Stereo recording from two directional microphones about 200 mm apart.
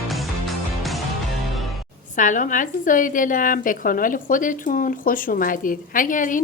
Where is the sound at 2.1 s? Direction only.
40° left (ahead or behind).